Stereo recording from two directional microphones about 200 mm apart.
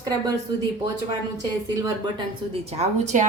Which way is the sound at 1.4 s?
20° right (ahead or behind).